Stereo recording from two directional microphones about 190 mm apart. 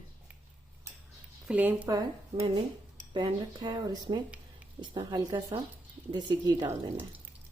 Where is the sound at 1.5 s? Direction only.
5° right (ahead or behind).